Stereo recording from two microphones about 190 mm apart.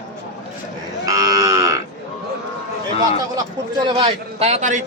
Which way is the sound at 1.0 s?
20° right (ahead or behind).